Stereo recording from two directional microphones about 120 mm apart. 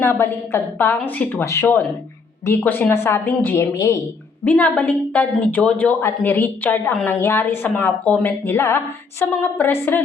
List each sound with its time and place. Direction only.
0.0 s a woman's voice: 20° left (ahead or behind)
4.4 s a woman's voice: 10° left (ahead or behind)